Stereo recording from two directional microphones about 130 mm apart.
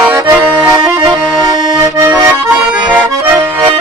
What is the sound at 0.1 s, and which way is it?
Accordion, 20° right (ahead or behind).